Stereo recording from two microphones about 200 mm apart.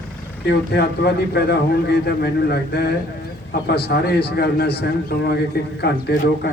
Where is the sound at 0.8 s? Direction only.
55° left (ahead or behind).